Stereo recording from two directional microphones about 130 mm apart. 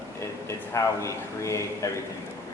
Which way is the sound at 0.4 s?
20° left (ahead or behind).